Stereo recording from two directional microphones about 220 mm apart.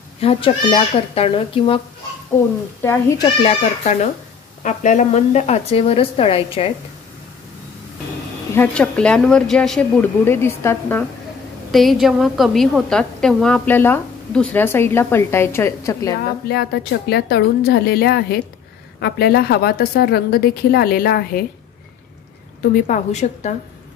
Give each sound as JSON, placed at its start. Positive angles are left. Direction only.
{"t": 0.2, "sound": "a woman's voice", "side_deg": 25}
{"t": 2.8, "sound": "a woman's voice", "side_deg": 10}
{"t": 3.4, "sound": "a woman's voice", "side_deg": 30}
{"t": 8.5, "sound": "a woman's voice", "side_deg": 5}
{"t": 16.4, "sound": "a woman's voice", "side_deg": 45}
{"t": 22.8, "sound": "a woman's voice", "side_deg": 35}